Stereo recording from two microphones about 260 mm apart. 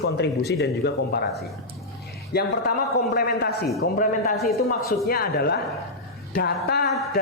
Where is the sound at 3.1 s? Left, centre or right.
Left.